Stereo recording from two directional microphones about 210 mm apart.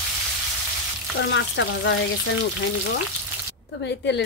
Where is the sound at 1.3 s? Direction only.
60° left (ahead or behind).